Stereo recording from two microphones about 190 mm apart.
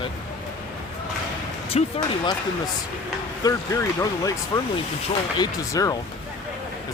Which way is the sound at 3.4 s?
15° left (ahead or behind).